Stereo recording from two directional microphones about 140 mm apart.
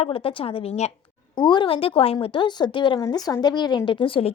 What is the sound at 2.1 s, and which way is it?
A woman's voice, 30° left (ahead or behind).